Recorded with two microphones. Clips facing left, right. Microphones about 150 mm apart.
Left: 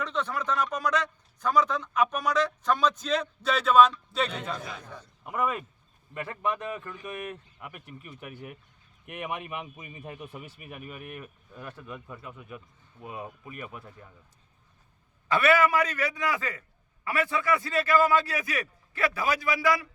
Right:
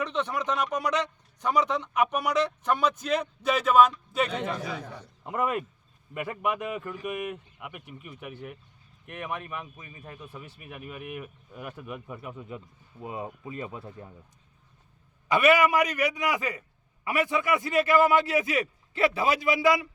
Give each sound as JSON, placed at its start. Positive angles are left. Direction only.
{"t": 0.0, "sound": "a man's voice", "side_deg": -15}
{"t": 4.6, "sound": "a man's voice", "side_deg": -75}
{"t": 5.2, "sound": "a man's voice", "side_deg": -20}
{"t": 10.6, "sound": "a man's voice", "side_deg": 0}
{"t": 15.3, "sound": "a man's voice", "side_deg": -15}